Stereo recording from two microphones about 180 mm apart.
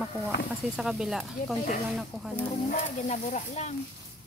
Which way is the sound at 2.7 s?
40° left (ahead or behind).